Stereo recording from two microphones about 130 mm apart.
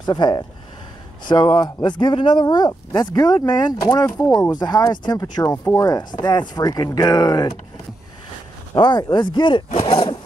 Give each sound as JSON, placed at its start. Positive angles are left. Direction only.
{"t": 0.0, "sound": "speech", "side_deg": 35}
{"t": 8.7, "sound": "speech", "side_deg": 35}
{"t": 9.8, "sound": "a sound", "side_deg": 45}